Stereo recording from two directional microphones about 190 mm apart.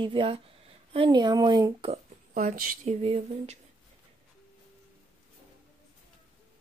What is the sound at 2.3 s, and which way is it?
Speech, 45° right (ahead or behind).